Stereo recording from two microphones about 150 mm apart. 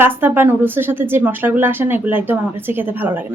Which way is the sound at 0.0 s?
15° right (ahead or behind).